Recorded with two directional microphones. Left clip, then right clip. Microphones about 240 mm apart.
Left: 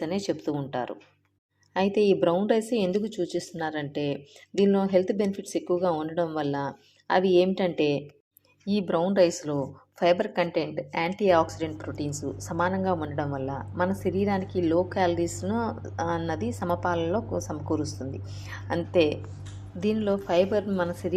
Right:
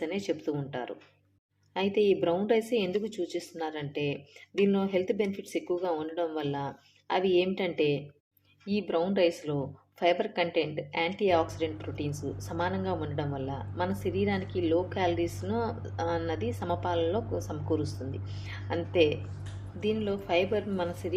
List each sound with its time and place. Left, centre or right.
0.0 s a woman's voice: left